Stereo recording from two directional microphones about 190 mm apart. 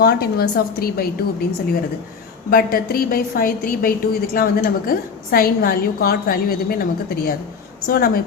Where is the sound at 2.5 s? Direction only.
50° left (ahead or behind).